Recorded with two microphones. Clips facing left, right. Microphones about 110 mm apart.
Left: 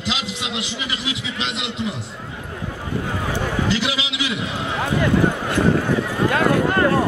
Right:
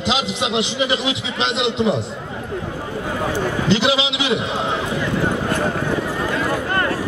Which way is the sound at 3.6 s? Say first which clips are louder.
Right 5 dB; 25° right (ahead or behind).